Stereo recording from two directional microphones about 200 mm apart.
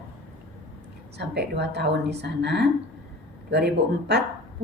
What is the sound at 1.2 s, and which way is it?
Speech, 60° right (ahead or behind).